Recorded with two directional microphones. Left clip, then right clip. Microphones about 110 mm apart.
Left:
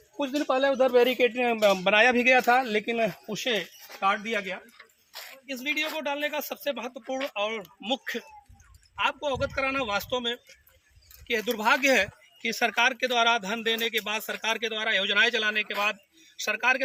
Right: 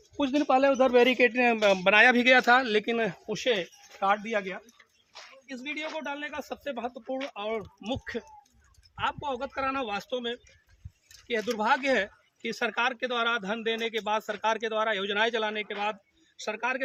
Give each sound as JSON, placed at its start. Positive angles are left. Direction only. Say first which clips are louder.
{"t": 0.2, "sound": "a man's voice", "louder": "right 2 dB", "side_deg": -50}